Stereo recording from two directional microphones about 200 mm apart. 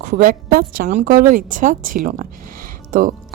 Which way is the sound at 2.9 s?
45° right (ahead or behind).